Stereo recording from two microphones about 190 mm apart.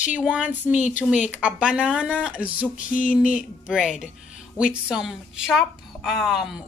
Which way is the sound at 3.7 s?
Centre (ahead or behind).